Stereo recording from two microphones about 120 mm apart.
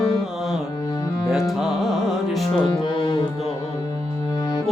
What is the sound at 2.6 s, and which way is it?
Music, 40° left (ahead or behind).